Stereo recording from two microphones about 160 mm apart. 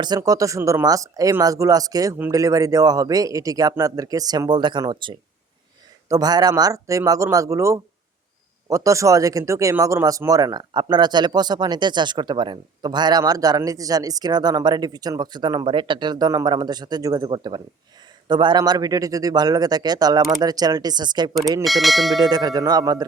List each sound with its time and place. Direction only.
0.0 s speech: 25° right (ahead or behind)
21.6 s speech: centre (ahead or behind)
22.2 s speech: 25° right (ahead or behind)